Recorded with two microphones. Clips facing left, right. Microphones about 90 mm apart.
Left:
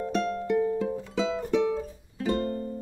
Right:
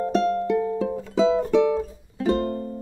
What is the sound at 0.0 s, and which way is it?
Music, 40° right (ahead or behind).